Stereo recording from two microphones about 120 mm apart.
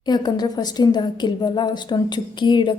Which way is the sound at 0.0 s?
35° left (ahead or behind).